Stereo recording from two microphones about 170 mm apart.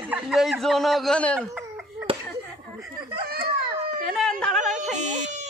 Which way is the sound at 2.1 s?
30° right (ahead or behind).